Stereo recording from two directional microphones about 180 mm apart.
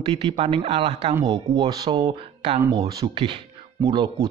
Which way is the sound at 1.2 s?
25° right (ahead or behind).